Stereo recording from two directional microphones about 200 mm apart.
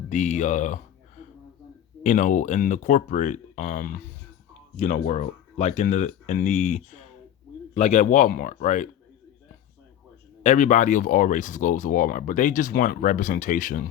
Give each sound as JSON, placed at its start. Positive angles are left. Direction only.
{"t": 0.1, "sound": "speech", "side_deg": 35}
{"t": 2.0, "sound": "speech", "side_deg": 40}
{"t": 5.0, "sound": "speech", "side_deg": 35}
{"t": 10.4, "sound": "speech", "side_deg": 40}